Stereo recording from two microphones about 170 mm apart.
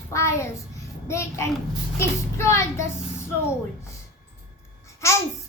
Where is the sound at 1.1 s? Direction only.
15° left (ahead or behind).